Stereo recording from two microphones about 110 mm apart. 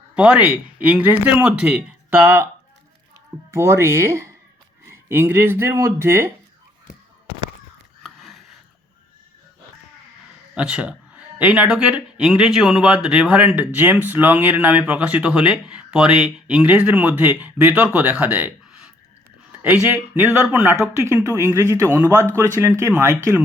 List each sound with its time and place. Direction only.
0.2 s a man's voice: 10° right (ahead or behind)
3.5 s speech: 25° right (ahead or behind)
8.0 s a sound: centre (ahead or behind)
10.5 s a man's voice: 10° right (ahead or behind); by 23.4 s 25° right (ahead or behind)